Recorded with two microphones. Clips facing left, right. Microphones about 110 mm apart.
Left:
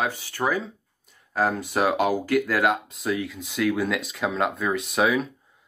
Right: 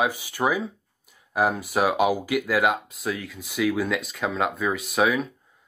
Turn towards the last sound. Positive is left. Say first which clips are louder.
# even
turn(degrees=0)  # may be behind; listen again after turning